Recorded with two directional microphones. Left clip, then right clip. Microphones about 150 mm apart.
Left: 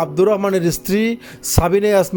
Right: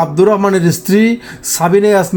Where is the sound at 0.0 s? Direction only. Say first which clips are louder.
Right 5 dB; 40° left (ahead or behind).